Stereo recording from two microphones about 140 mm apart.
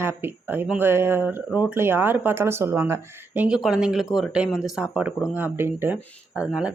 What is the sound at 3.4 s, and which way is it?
Speech, 5° right (ahead or behind).